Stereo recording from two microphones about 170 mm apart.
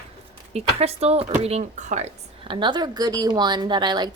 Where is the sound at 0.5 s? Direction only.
35° right (ahead or behind).